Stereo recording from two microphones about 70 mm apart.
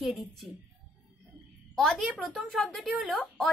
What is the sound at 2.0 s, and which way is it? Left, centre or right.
Speech, centre.